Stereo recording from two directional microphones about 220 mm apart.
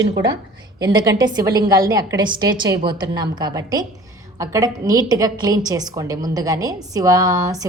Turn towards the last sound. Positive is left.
turn(degrees=-15)  # may be behind; listen again after turning